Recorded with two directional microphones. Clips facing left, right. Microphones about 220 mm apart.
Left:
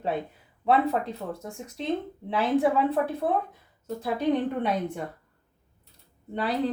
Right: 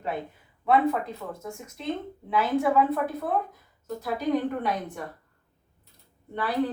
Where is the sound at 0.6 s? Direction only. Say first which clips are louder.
Even; 35° left (ahead or behind).